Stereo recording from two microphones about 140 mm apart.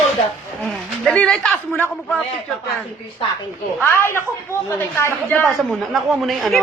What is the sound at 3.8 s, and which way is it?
Speech, 15° left (ahead or behind).